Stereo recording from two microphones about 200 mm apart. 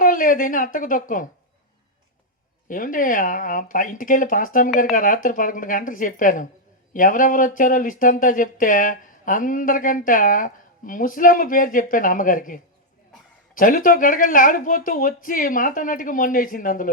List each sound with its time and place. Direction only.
0.0 s a woman's voice: 45° left (ahead or behind)
2.6 s speech: 40° left (ahead or behind)